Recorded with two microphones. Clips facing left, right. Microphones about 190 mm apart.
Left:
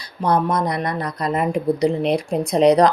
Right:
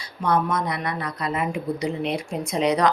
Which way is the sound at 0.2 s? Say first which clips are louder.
Left 4 dB; 35° left (ahead or behind).